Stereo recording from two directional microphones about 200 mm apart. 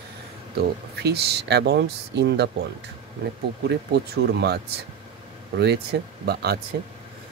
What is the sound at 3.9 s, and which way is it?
Speech, 55° right (ahead or behind).